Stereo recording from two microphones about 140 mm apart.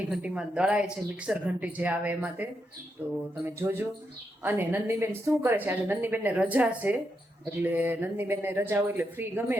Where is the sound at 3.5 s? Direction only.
15° right (ahead or behind).